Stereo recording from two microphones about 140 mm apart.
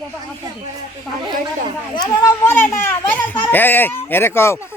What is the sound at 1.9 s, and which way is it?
Speech, 25° left (ahead or behind).